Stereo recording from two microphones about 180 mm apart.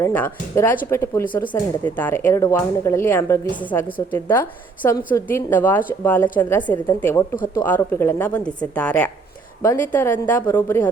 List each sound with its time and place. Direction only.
0.0 s speech: 10° left (ahead or behind)
6.4 s a woman's voice: 25° left (ahead or behind)